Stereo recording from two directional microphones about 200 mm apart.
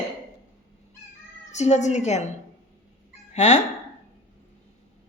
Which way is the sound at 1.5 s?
35° left (ahead or behind).